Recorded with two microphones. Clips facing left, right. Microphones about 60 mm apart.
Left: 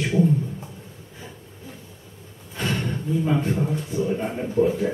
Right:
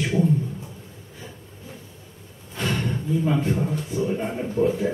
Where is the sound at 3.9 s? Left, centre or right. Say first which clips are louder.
Even; centre.